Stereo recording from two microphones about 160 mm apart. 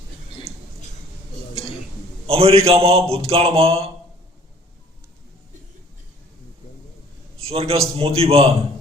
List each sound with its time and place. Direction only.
0.5 s a sound: centre (ahead or behind)
2.2 s a man's voice: 40° right (ahead or behind)
7.4 s a man's voice: 40° right (ahead or behind)